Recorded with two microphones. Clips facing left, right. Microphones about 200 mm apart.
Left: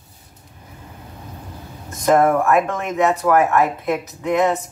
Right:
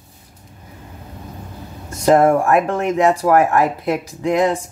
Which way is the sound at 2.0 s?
30° right (ahead or behind).